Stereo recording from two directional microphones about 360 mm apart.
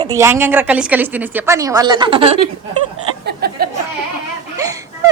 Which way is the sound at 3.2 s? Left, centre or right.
Right.